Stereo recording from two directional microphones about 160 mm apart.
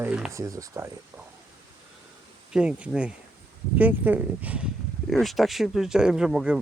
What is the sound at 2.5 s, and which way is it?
Speech, 5° right (ahead or behind).